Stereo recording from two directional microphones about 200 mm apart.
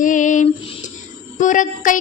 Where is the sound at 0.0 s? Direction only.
40° left (ahead or behind).